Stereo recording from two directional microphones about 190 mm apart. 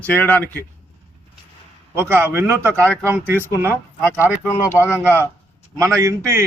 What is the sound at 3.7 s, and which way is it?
A man's voice, 10° left (ahead or behind).